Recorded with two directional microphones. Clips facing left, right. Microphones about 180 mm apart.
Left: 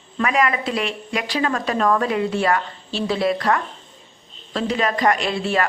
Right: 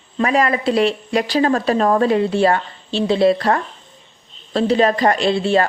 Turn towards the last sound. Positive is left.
turn(degrees=-30)  # may be behind; listen again after turning